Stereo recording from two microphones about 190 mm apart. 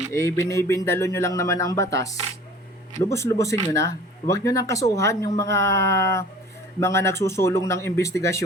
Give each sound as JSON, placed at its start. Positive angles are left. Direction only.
{"t": 0.1, "sound": "speech", "side_deg": 15}